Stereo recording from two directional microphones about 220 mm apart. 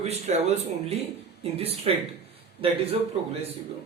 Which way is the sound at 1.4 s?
25° right (ahead or behind).